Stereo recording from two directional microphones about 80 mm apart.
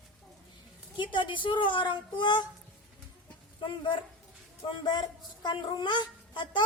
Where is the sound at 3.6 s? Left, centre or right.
Left.